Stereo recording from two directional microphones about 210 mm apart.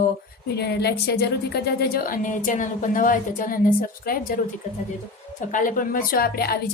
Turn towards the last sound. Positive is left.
turn(degrees=45)  # may be behind; listen again after turning